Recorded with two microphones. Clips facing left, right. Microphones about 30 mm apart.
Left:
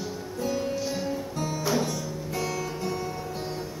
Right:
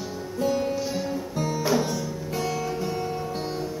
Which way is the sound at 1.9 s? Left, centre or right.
Centre.